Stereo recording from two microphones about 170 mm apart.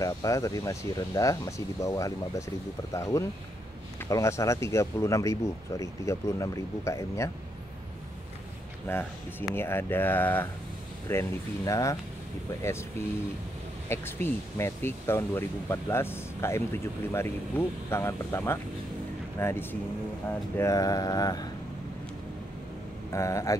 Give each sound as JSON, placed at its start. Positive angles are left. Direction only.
{"t": 0.0, "sound": "speech", "side_deg": 20}
{"t": 8.9, "sound": "speech", "side_deg": 15}
{"t": 23.1, "sound": "speech", "side_deg": 20}